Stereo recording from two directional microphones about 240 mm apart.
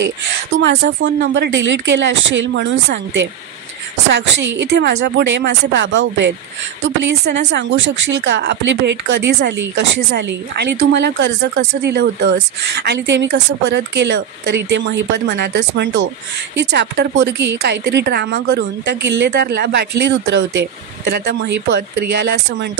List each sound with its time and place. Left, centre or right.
0.0 s a woman's voice: right